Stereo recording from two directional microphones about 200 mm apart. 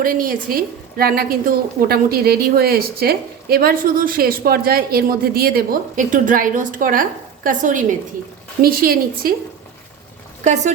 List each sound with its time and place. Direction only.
0.0 s a woman's voice: 45° right (ahead or behind)
10.4 s speech: 35° right (ahead or behind)